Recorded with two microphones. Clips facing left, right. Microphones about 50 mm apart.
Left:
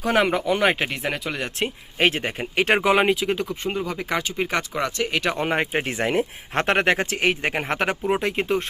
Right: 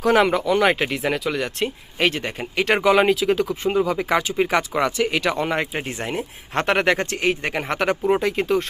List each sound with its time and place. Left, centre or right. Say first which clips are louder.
0.0 s speech: right 3 dB; centre; by 2.8 s left
2.8 s speech: right 5 dB; centre
3.2 s speech: right 4 dB; centre
5.4 s speech: even; left
5.9 s speech: left 5 dB; left
6.5 s speech: right 2 dB; centre
7.4 s speech: even; left
7.7 s speech: right 5 dB; centre